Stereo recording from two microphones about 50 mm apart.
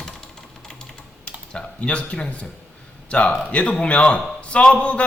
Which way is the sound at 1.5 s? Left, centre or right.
Left.